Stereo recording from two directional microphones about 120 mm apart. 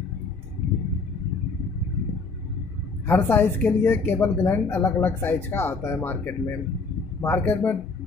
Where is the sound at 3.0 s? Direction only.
15° left (ahead or behind).